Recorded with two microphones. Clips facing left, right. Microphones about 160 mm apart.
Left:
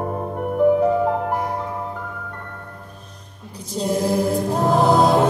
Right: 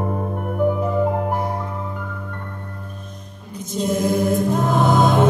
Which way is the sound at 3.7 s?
35° left (ahead or behind).